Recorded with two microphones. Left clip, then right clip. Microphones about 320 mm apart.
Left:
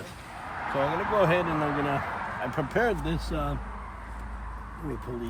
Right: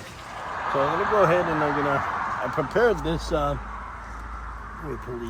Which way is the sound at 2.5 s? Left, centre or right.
Centre.